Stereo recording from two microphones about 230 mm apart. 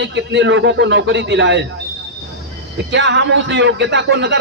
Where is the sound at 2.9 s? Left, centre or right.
Right.